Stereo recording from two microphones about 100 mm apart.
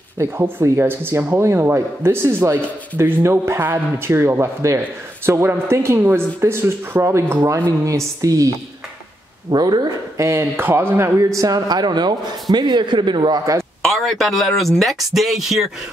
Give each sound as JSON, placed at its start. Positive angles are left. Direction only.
{"t": 0.2, "sound": "speech", "side_deg": -25}
{"t": 10.2, "sound": "speech", "side_deg": -25}
{"t": 11.1, "sound": "a man's voice", "side_deg": -35}
{"t": 13.8, "sound": "speech", "side_deg": 0}